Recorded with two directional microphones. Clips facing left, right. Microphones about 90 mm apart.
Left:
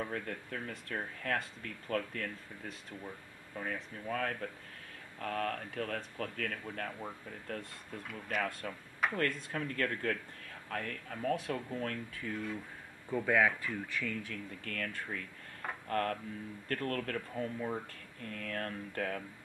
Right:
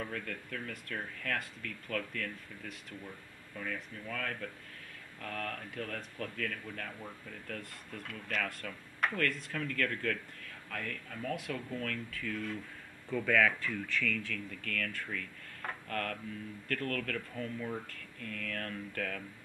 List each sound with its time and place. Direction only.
0.0 s speech: 30° left (ahead or behind)
8.0 s speech: 5° left (ahead or behind)
8.4 s speech: 25° left (ahead or behind)
9.0 s a sound: 5° left (ahead or behind)
9.5 s speech: 30° left (ahead or behind)